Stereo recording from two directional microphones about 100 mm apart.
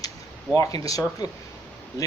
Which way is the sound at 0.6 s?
35° left (ahead or behind).